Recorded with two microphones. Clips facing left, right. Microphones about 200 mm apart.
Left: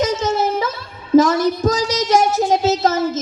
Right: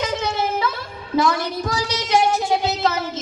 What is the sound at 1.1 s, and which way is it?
Child singing, 40° left (ahead or behind).